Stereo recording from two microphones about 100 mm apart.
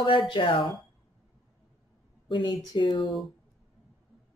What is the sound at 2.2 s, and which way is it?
Speech, 55° left (ahead or behind).